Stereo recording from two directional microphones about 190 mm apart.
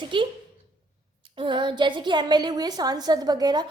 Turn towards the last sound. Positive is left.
turn(degrees=-20)  # may be behind; listen again after turning